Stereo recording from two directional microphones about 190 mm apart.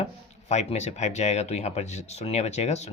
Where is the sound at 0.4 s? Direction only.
35° left (ahead or behind).